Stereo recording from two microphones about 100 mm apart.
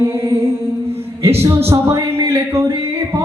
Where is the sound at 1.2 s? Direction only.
30° right (ahead or behind).